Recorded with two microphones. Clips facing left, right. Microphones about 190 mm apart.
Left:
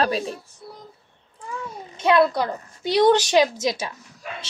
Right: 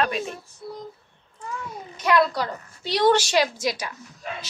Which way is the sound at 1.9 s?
25° left (ahead or behind).